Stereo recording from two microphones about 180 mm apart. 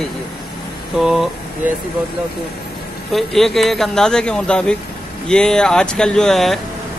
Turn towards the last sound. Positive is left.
turn(degrees=0)  # may be behind; listen again after turning